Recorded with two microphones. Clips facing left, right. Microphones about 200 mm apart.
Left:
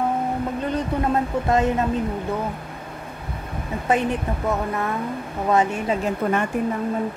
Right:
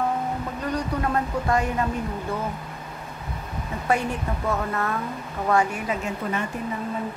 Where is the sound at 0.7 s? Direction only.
20° left (ahead or behind).